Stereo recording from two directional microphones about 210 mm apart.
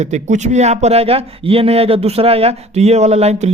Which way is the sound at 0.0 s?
35° right (ahead or behind).